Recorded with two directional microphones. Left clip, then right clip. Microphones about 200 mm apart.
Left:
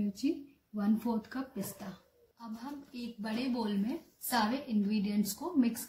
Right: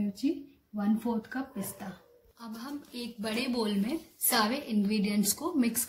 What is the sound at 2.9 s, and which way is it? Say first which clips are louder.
A woman's voice: right 6 dB; 25° right (ahead or behind).